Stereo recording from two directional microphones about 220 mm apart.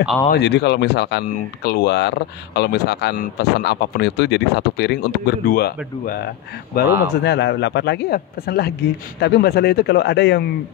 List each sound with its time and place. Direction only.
0.3 s speech: 50° left (ahead or behind)